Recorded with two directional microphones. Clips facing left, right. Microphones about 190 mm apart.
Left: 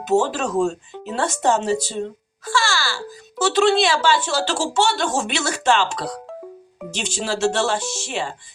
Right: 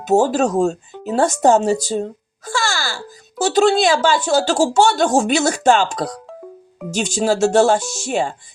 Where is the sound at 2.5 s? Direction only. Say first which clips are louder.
Even; 45° right (ahead or behind).